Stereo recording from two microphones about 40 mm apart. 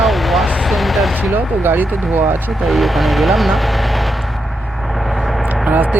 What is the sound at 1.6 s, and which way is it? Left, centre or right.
Speech, right.